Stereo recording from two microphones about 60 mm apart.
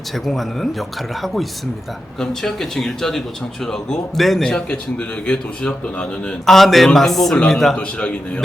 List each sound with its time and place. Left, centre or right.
0.3 s a man's voice: centre
4.5 s a man's voice: centre
6.4 s a man's voice: centre
7.8 s a man's voice: centre